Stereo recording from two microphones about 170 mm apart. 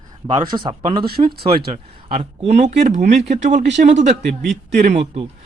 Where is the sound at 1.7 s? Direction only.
40° right (ahead or behind).